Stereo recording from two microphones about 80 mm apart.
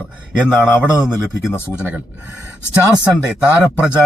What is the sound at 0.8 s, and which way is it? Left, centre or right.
Speech, centre.